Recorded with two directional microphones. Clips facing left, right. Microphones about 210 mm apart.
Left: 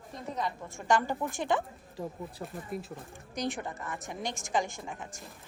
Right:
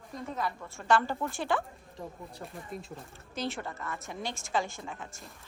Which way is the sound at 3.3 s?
15° left (ahead or behind).